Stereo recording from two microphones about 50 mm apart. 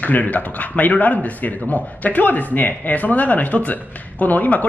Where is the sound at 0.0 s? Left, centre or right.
Left.